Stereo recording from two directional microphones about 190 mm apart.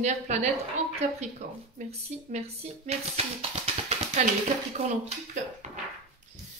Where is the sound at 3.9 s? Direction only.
35° right (ahead or behind).